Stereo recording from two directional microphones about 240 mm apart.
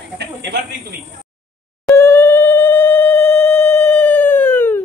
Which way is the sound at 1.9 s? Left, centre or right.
Centre.